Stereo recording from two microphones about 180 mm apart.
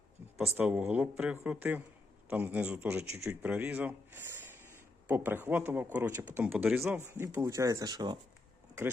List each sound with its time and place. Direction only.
0.5 s a man's voice: 10° right (ahead or behind)